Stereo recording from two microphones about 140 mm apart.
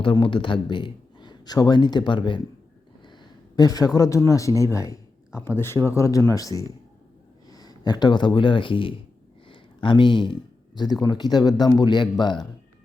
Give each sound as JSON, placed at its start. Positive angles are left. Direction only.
{"t": 0.0, "sound": "a man's voice", "side_deg": 35}
{"t": 3.5, "sound": "speech", "side_deg": 25}
{"t": 4.6, "sound": "a sound", "side_deg": 20}
{"t": 5.4, "sound": "speech", "side_deg": 15}
{"t": 9.5, "sound": "a sound", "side_deg": 35}
{"t": 11.0, "sound": "a man's voice", "side_deg": 30}